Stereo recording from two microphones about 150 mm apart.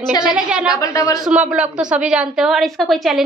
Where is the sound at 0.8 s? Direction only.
20° left (ahead or behind).